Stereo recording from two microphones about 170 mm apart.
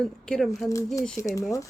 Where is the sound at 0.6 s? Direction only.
20° left (ahead or behind).